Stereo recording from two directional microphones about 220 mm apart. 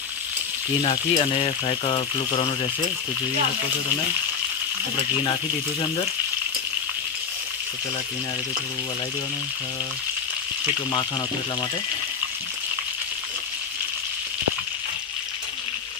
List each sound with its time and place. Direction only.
0.8 s speech: 25° left (ahead or behind)